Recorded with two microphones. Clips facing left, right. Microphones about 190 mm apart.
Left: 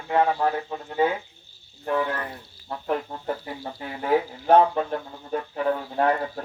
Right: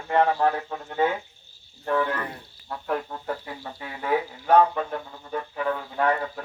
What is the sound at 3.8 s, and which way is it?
Speech, 30° left (ahead or behind).